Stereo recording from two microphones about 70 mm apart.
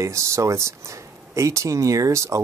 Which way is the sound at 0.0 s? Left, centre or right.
Right.